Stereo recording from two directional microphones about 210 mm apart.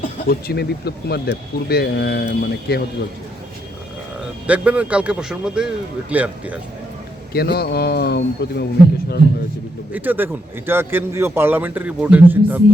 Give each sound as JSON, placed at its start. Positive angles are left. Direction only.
{"t": 0.0, "sound": "speech", "side_deg": 45}
{"t": 4.4, "sound": "a man's voice", "side_deg": -5}
{"t": 7.3, "sound": "speech", "side_deg": 50}
{"t": 9.9, "sound": "a man's voice", "side_deg": -10}